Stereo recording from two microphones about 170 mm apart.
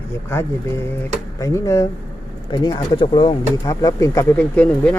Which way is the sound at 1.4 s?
20° left (ahead or behind).